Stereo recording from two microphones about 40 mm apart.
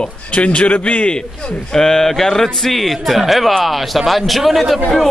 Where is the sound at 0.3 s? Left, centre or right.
Left.